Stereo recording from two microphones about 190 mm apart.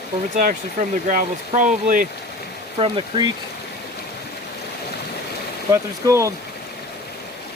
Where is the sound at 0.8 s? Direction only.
40° right (ahead or behind).